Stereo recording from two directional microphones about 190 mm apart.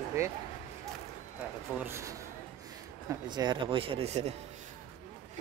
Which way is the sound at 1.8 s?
15° right (ahead or behind).